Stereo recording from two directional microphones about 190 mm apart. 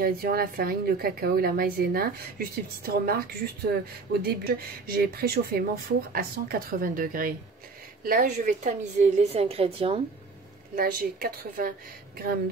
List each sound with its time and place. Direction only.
0.0 s a woman's voice: 50° right (ahead or behind); by 10.0 s 30° right (ahead or behind)
10.8 s a woman's voice: 50° right (ahead or behind)